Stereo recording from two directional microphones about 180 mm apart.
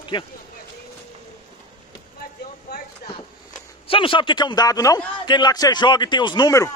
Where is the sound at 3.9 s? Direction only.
30° left (ahead or behind).